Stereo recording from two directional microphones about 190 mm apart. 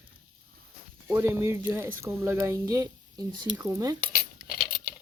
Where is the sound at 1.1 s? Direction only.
10° right (ahead or behind).